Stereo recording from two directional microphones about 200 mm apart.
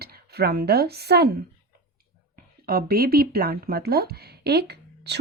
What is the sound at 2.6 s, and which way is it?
A woman's voice, 50° right (ahead or behind).